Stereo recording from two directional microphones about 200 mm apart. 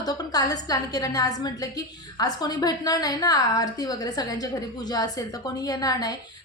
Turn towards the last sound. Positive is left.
turn(degrees=20)  # may be behind; listen again after turning